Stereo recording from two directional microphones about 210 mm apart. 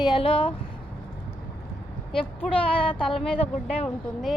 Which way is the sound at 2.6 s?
25° left (ahead or behind).